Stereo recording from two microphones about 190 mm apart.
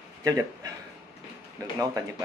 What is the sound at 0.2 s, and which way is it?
A man's voice, 20° right (ahead or behind).